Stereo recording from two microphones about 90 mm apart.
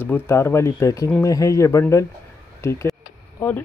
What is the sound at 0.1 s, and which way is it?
Speech, 25° left (ahead or behind).